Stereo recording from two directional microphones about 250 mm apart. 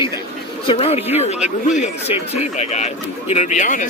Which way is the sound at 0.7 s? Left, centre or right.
Left.